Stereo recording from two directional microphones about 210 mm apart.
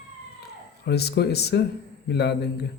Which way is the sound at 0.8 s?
50° left (ahead or behind).